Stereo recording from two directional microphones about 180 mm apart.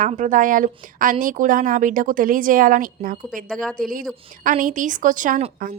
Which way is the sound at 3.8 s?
50° right (ahead or behind).